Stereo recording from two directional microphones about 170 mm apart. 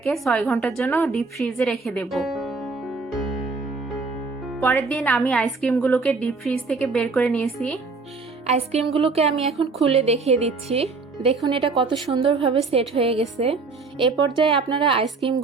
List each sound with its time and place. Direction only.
0.0 s a woman's voice: centre (ahead or behind)
0.8 s a woman's voice: 10° left (ahead or behind)
4.6 s a woman's voice: 15° left (ahead or behind)
8.4 s speech: 40° right (ahead or behind)
9.5 s a woman's voice: centre (ahead or behind)
9.8 s a woman's voice: 35° right (ahead or behind)